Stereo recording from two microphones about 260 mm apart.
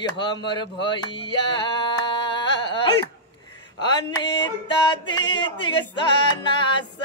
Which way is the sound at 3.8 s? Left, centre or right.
Centre.